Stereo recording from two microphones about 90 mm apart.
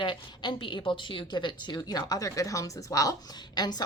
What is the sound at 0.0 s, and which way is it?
Speech, 65° left (ahead or behind).